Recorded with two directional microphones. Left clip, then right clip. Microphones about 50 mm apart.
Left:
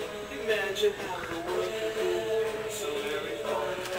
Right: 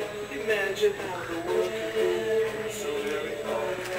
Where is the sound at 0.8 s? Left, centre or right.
Centre.